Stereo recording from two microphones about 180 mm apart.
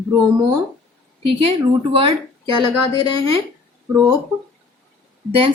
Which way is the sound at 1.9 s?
30° right (ahead or behind).